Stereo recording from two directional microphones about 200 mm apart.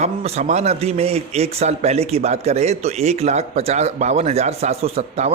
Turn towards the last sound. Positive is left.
turn(degrees=-30)  # may be behind; listen again after turning